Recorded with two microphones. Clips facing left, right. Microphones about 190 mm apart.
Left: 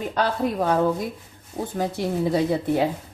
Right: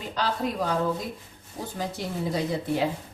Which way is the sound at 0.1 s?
55° left (ahead or behind).